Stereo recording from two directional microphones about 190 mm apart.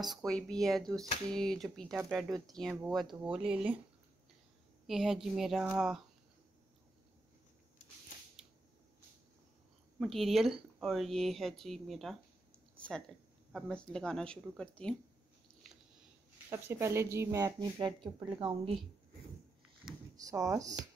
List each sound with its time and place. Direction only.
0.0 s speech: centre (ahead or behind)
4.8 s speech: centre (ahead or behind)
9.9 s speech: centre (ahead or behind)
12.7 s a sound: 5° left (ahead or behind)
13.5 s speech: centre (ahead or behind)
16.4 s speech: 15° right (ahead or behind)
19.8 s a sound: centre (ahead or behind)
20.2 s speech: 20° right (ahead or behind)